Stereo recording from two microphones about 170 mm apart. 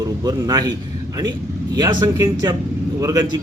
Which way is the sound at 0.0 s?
20° right (ahead or behind).